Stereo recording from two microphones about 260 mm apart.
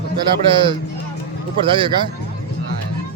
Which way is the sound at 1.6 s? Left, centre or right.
Centre.